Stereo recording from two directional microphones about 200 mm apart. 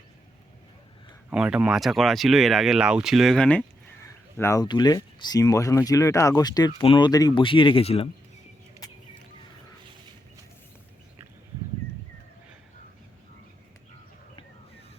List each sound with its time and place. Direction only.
1.3 s speech: 5° right (ahead or behind); by 8.1 s 30° left (ahead or behind)